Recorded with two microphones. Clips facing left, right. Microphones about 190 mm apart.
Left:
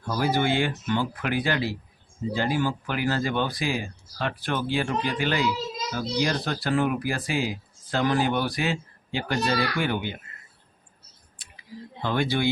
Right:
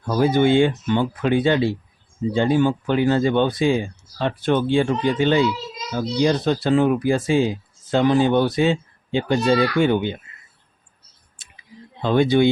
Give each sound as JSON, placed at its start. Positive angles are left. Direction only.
{"t": 0.1, "sound": "speech", "side_deg": -20}
{"t": 12.0, "sound": "speech", "side_deg": -20}